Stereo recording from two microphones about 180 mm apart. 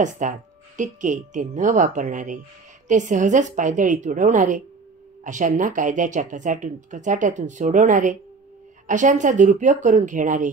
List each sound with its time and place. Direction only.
0.0 s speech: 45° right (ahead or behind)